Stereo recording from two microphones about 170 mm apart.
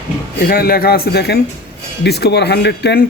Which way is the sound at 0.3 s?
65° left (ahead or behind).